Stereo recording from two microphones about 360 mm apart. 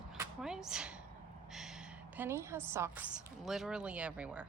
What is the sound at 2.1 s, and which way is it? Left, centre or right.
A woman's voice, centre.